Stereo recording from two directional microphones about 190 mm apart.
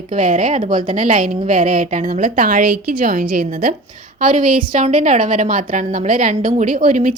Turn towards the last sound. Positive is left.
turn(degrees=-45)  # may be behind; listen again after turning